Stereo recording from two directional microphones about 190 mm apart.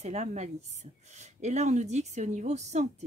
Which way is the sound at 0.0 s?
35° right (ahead or behind).